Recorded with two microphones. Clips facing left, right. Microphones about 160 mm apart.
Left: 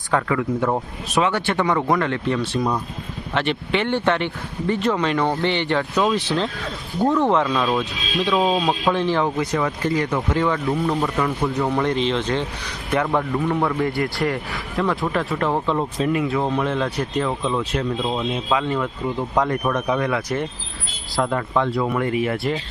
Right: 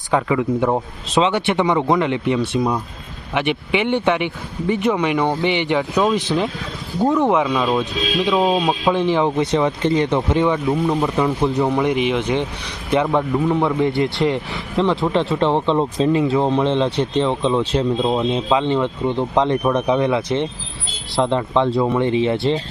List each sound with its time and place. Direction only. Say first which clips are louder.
0.1 s speech: right 3 dB; 15° right (ahead or behind)